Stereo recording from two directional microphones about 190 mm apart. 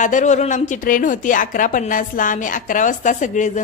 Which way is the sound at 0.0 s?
40° left (ahead or behind).